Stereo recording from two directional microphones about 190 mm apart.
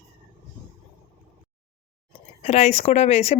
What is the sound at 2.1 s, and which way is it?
Speech, 35° left (ahead or behind).